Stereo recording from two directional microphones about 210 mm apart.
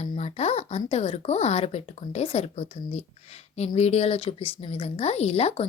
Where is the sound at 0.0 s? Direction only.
30° left (ahead or behind).